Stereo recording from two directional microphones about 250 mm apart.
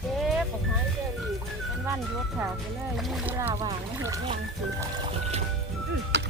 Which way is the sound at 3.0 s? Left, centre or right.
Centre.